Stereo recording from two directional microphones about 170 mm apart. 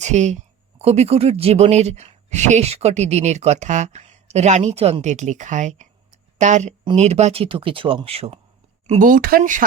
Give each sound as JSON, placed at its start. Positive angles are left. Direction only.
{"t": 0.0, "sound": "speech", "side_deg": -45}
{"t": 8.9, "sound": "speech", "side_deg": -50}